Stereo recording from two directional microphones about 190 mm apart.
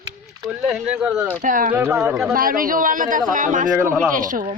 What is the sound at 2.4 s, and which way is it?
Speech, 50° right (ahead or behind).